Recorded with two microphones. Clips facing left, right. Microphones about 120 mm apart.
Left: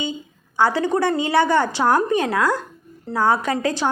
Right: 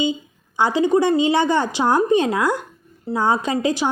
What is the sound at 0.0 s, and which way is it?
A woman's voice, 20° right (ahead or behind).